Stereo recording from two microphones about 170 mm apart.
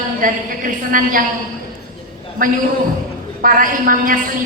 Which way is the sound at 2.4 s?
55° right (ahead or behind).